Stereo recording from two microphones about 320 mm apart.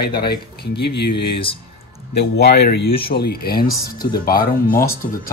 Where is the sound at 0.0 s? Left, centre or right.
Left.